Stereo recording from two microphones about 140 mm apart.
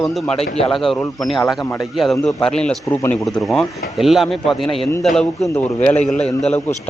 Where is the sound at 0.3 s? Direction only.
45° left (ahead or behind).